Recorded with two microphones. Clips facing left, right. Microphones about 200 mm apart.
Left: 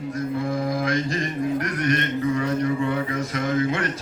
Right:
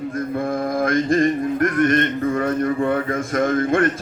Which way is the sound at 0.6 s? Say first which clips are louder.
Right 4 dB; 50° right (ahead or behind).